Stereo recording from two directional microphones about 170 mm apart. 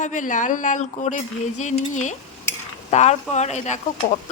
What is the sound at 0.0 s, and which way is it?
Speech, 50° left (ahead or behind).